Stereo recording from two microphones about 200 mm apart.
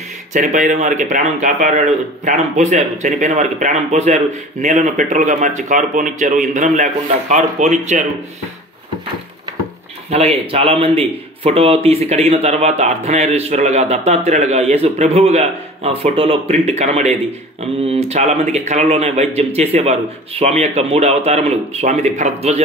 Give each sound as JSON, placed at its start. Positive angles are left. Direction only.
{"t": 0.3, "sound": "a man's voice", "side_deg": -40}
{"t": 10.0, "sound": "a man's voice", "side_deg": -30}